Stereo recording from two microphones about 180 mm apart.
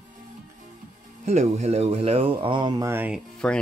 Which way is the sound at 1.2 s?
35° right (ahead or behind).